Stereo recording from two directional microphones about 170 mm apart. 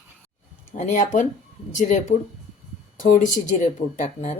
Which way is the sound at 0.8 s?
45° left (ahead or behind).